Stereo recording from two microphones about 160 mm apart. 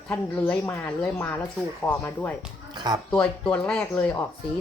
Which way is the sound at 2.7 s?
25° right (ahead or behind).